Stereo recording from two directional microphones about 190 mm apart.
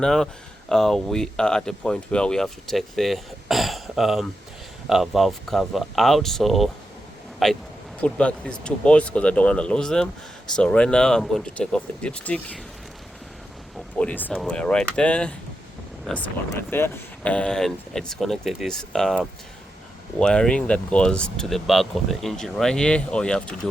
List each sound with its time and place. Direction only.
0.0 s speech: 5° left (ahead or behind)
13.7 s speech: 5° left (ahead or behind)